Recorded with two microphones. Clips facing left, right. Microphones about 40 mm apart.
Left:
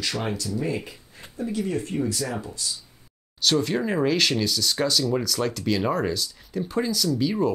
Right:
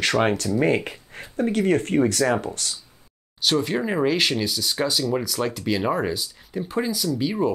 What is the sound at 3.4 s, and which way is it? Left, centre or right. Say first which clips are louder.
Speech: right 1 dB; centre.